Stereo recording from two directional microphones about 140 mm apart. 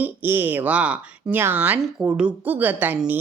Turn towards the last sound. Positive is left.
turn(degrees=-10)  # may be behind; listen again after turning